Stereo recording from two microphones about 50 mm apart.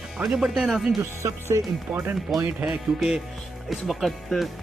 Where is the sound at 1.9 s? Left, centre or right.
Right.